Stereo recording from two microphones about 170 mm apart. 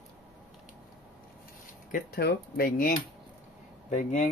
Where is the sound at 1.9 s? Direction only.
65° left (ahead or behind).